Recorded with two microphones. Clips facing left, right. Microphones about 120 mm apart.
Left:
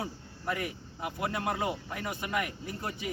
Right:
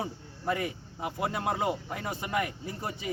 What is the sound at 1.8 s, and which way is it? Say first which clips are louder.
Speech: right 1 dB; 25° right (ahead or behind).